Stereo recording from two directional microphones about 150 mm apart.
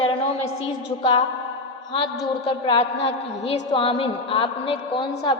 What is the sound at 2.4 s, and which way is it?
A woman's voice, 35° left (ahead or behind).